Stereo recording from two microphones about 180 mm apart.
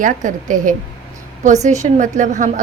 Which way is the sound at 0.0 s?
45° right (ahead or behind).